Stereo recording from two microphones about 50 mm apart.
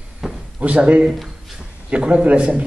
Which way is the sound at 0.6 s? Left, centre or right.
Right.